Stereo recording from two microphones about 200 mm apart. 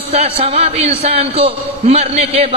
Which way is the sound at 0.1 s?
30° right (ahead or behind).